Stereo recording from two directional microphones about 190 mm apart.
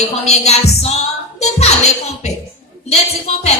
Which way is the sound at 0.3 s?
35° left (ahead or behind).